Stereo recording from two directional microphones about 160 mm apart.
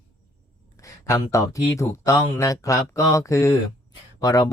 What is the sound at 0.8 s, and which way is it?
Speech, 20° left (ahead or behind).